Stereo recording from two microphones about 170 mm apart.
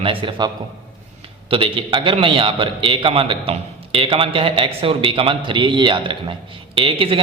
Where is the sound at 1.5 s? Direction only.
30° right (ahead or behind).